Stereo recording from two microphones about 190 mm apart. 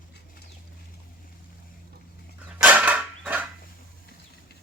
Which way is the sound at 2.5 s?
5° right (ahead or behind).